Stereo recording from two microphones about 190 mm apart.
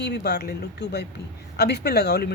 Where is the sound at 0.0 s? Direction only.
60° left (ahead or behind).